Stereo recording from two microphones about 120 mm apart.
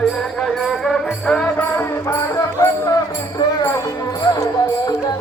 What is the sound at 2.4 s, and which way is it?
Music, 30° left (ahead or behind).